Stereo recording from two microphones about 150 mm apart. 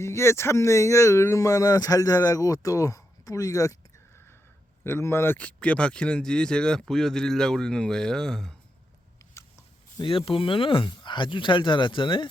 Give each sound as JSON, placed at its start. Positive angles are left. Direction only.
{"t": 0.0, "sound": "speech", "side_deg": 15}
{"t": 4.8, "sound": "speech", "side_deg": 15}
{"t": 10.0, "sound": "speech", "side_deg": 35}